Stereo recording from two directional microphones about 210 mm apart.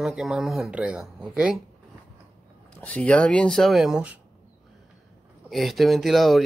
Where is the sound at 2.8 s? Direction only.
5° left (ahead or behind).